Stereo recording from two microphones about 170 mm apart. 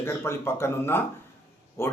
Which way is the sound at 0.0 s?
15° left (ahead or behind).